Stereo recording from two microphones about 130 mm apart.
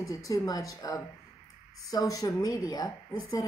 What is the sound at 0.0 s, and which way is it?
A woman's voice, 25° left (ahead or behind).